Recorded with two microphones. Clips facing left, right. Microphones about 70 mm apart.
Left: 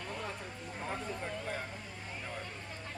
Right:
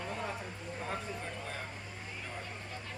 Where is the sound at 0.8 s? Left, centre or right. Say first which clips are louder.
Left 1 dB; centre.